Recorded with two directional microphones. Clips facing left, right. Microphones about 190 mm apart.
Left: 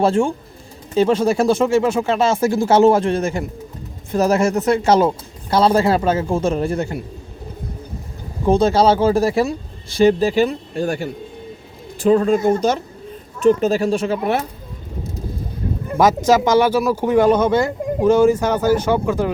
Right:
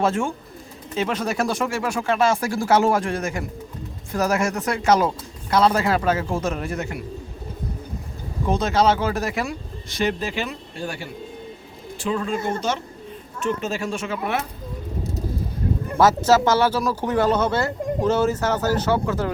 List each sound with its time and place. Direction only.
0.0 s speech: 30° left (ahead or behind)
8.4 s speech: 30° left (ahead or behind)
16.0 s speech: 15° left (ahead or behind)